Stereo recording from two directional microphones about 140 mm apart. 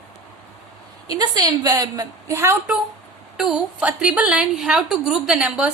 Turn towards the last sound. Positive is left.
turn(degrees=-10)  # may be behind; listen again after turning